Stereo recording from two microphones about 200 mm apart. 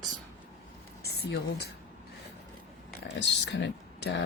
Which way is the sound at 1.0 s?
55° left (ahead or behind).